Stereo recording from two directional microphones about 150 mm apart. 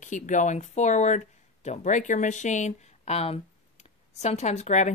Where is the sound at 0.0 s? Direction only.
55° left (ahead or behind).